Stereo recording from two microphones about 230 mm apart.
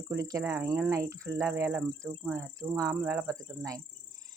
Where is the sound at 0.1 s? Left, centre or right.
Centre.